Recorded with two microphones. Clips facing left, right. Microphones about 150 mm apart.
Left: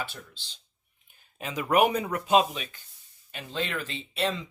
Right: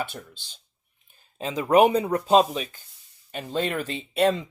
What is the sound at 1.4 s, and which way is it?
Speech, 30° right (ahead or behind).